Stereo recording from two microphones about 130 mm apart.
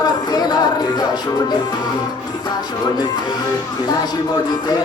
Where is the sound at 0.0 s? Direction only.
30° left (ahead or behind).